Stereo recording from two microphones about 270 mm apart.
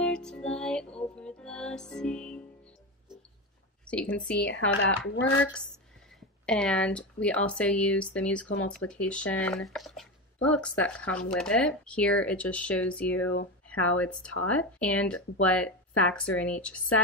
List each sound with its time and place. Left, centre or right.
0.0 s music: centre
3.8 s speech: centre
4.7 s speech: left
6.4 s speech: centre